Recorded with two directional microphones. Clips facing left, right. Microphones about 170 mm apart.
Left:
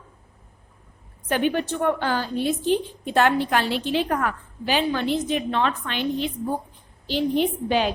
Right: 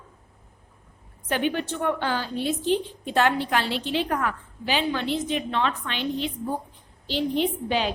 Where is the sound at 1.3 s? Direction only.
45° left (ahead or behind).